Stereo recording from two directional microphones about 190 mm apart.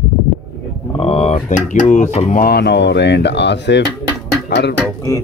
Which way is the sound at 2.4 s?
60° left (ahead or behind).